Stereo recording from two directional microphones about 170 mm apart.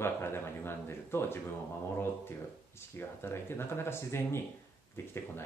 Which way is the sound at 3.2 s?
15° left (ahead or behind).